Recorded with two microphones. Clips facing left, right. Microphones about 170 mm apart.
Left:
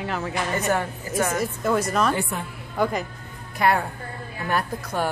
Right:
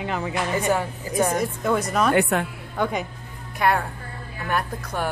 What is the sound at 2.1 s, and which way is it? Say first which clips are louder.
Speech: right 7 dB; 70° right (ahead or behind).